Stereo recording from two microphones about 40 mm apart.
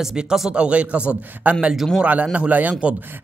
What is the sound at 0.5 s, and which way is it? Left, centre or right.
Speech, right.